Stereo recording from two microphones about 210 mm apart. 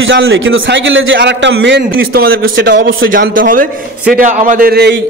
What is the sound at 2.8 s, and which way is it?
Speech, 70° right (ahead or behind).